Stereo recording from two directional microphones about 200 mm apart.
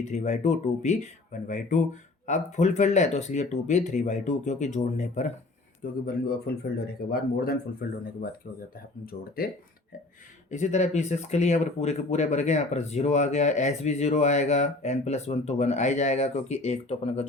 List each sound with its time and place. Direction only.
0.0 s speech: 35° left (ahead or behind)
5.8 s speech: 45° left (ahead or behind)
10.5 s speech: 35° left (ahead or behind)